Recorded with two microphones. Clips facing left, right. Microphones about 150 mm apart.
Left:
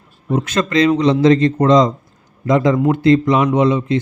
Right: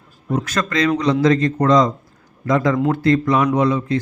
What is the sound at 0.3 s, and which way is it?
A man's voice, 25° left (ahead or behind).